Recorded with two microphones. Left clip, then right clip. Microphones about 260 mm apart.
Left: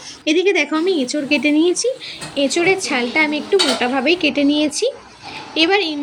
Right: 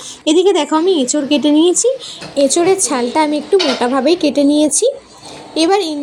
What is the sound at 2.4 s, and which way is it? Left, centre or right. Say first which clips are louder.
A woman's voice: right 4 dB; centre.